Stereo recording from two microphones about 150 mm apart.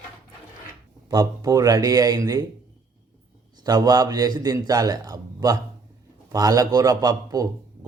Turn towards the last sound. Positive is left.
turn(degrees=-25)  # may be behind; listen again after turning